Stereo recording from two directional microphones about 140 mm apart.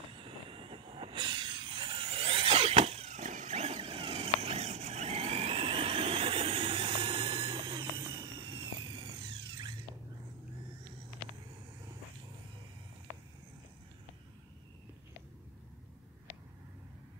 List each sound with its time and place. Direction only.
0.1 s vehicle: 40° right (ahead or behind)